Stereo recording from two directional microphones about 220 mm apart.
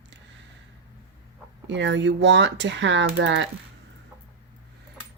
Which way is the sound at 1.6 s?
55° right (ahead or behind).